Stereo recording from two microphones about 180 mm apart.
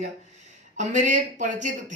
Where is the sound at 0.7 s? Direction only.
40° right (ahead or behind).